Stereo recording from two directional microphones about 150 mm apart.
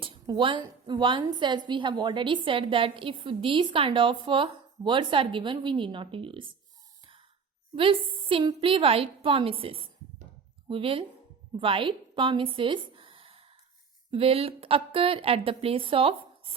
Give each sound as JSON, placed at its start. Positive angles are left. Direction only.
{"t": 0.0, "sound": "a woman's voice", "side_deg": -35}
{"t": 7.0, "sound": "sigh", "side_deg": -35}
{"t": 7.8, "sound": "a woman's voice", "side_deg": -35}
{"t": 11.5, "sound": "a sound", "side_deg": -35}
{"t": 14.1, "sound": "a woman's voice", "side_deg": -40}